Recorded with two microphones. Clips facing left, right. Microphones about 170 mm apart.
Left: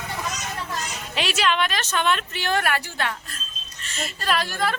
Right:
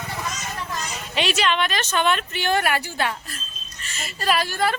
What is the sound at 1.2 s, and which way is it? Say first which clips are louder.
A woman's voice: right 1 dB; centre (ahead or behind).